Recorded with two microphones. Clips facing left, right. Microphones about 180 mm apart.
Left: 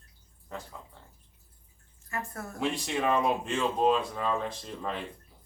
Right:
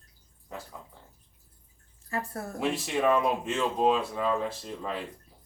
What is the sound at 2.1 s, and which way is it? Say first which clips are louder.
Speech: right 3 dB; 35° right (ahead or behind).